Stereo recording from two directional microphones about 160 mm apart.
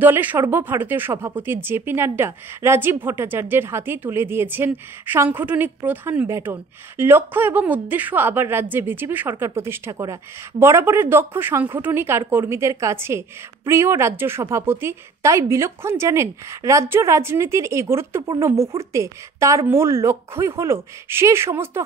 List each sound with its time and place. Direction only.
0.0 s speech: 10° right (ahead or behind)